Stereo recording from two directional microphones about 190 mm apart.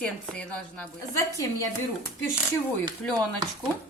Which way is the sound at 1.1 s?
15° left (ahead or behind).